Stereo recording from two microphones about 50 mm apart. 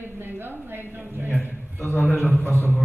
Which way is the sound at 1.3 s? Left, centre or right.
Left.